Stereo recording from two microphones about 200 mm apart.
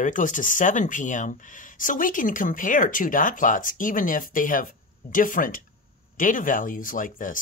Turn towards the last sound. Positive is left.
turn(degrees=40)  # may be behind; listen again after turning